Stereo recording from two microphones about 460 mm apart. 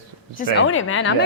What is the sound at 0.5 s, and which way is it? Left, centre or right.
Speech, left.